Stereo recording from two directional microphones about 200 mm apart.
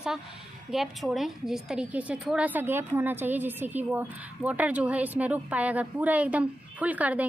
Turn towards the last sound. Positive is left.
turn(degrees=-5)  # may be behind; listen again after turning